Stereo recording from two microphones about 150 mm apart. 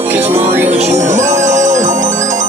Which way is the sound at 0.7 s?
50° right (ahead or behind).